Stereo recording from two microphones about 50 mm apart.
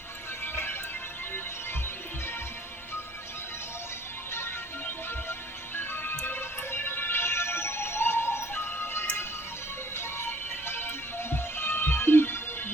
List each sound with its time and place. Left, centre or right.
0.4 s music: left
4.3 s music: left